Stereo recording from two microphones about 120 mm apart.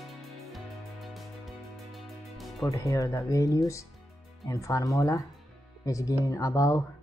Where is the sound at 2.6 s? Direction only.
25° left (ahead or behind).